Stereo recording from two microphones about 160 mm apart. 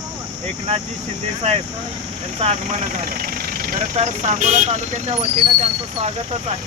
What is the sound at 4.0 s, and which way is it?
Speech, 45° right (ahead or behind).